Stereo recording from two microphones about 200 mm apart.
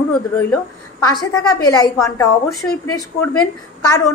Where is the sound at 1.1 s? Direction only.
20° left (ahead or behind).